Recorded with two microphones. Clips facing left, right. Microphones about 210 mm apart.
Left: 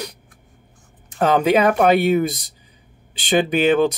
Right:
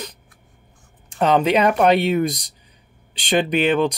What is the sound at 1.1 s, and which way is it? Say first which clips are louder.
Speech: left 1 dB; 5° left (ahead or behind).